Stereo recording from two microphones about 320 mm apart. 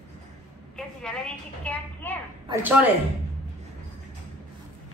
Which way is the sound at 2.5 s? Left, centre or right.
Centre.